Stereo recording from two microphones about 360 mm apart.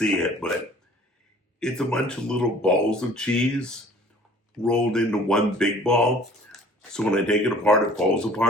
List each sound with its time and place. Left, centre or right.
0.0 s speech: centre
1.5 s speech: centre